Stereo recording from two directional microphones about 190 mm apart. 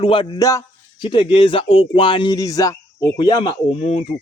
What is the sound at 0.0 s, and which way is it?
A man's voice, 25° left (ahead or behind).